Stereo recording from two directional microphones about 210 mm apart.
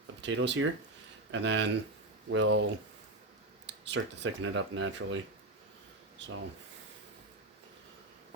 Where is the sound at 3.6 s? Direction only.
55° right (ahead or behind).